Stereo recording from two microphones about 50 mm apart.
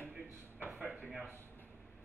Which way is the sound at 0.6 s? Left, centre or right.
Right.